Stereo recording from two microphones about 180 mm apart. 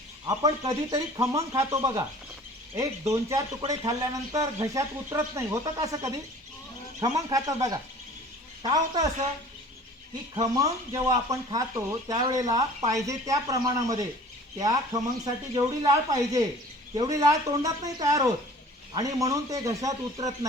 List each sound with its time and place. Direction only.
0.3 s speech: 20° right (ahead or behind)
3.1 s speech: 15° right (ahead or behind)
7.3 s speech: 20° right (ahead or behind)
10.3 s speech: 20° right (ahead or behind)